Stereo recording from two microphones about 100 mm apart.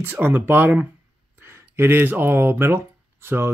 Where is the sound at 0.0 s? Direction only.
20° right (ahead or behind).